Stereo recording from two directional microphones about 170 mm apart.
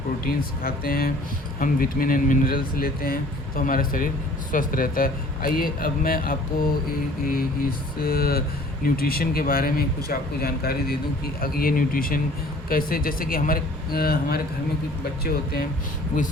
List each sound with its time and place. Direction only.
0.6 s speech: 60° left (ahead or behind)
8.0 s speech: 60° left (ahead or behind)